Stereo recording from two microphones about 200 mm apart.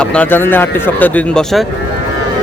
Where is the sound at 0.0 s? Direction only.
5° left (ahead or behind).